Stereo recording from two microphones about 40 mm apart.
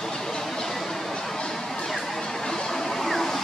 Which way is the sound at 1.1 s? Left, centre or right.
Centre.